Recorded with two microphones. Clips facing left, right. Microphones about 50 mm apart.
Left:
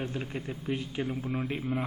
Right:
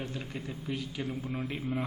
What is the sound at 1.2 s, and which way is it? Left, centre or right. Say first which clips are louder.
Speech: left 3 dB; centre.